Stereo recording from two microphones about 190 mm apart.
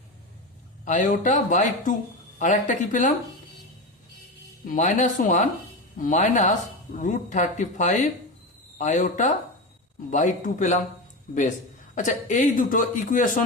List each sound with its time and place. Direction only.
0.9 s speech: 40° left (ahead or behind)
4.6 s speech: 45° left (ahead or behind)
11.9 s speech: 40° left (ahead or behind)